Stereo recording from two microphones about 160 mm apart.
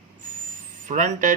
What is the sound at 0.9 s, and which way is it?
Speech, 50° right (ahead or behind).